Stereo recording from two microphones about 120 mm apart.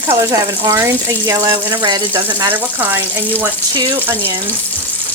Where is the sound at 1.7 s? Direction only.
45° right (ahead or behind).